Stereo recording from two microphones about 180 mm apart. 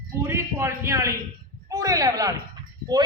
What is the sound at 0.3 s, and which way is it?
A man's voice, 15° right (ahead or behind).